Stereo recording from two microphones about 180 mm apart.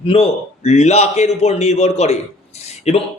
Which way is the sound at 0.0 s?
30° left (ahead or behind).